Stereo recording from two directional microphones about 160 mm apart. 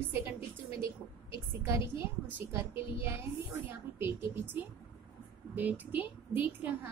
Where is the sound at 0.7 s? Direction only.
15° right (ahead or behind).